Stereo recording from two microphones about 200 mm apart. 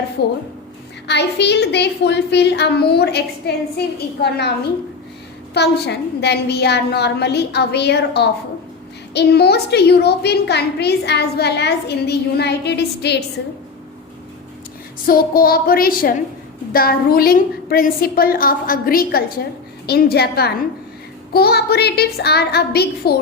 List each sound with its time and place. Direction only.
0.2 s a woman's voice: 55° left (ahead or behind)
5.5 s a woman's voice: 55° left (ahead or behind)
15.0 s a woman's voice: 45° left (ahead or behind)